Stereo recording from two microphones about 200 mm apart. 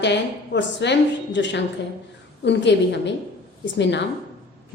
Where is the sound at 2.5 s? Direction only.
60° left (ahead or behind).